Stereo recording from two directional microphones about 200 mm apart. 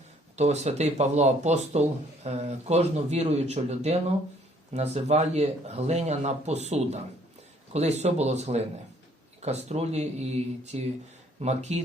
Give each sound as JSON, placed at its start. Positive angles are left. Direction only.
{"t": 0.3, "sound": "speech", "side_deg": -35}